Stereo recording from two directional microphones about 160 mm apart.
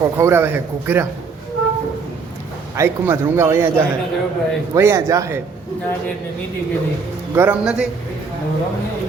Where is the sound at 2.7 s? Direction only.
15° right (ahead or behind).